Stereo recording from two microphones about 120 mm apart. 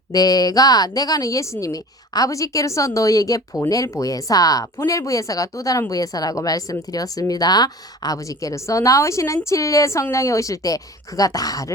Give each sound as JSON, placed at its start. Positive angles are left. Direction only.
{"t": 0.1, "sound": "a woman's voice", "side_deg": 35}